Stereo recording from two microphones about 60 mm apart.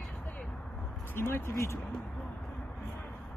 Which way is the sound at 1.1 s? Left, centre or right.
Left.